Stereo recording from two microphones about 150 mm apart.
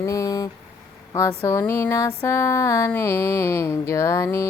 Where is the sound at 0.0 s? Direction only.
20° left (ahead or behind).